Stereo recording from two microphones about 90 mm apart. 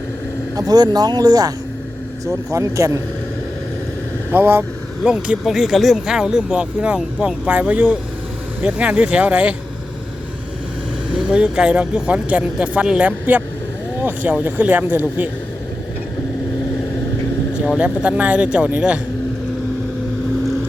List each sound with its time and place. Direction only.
0.5 s speech: 45° right (ahead or behind)
4.3 s speech: 25° right (ahead or behind)
5.0 s speech: 10° right (ahead or behind)
11.3 s speech: 10° right (ahead or behind)
17.7 s speech: 15° right (ahead or behind)